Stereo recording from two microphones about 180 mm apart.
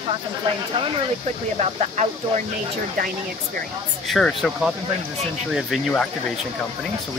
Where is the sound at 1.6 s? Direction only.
40° right (ahead or behind).